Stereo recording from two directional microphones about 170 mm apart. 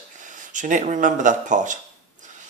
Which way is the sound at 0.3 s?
50° right (ahead or behind).